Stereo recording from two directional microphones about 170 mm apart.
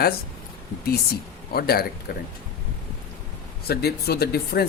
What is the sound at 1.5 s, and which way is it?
Speech, 65° left (ahead or behind).